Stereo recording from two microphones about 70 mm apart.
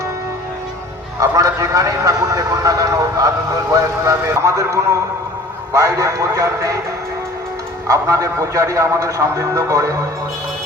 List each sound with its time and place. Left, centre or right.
1.2 s a man's voice: right
7.9 s a man's voice: right